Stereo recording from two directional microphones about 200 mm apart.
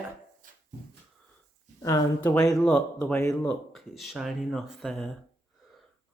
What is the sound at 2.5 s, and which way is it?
Speech, 5° left (ahead or behind).